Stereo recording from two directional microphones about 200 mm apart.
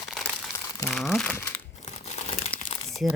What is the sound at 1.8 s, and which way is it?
Crumpling, 35° left (ahead or behind).